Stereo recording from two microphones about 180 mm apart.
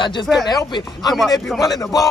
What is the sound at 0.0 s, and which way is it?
Speech, 25° left (ahead or behind).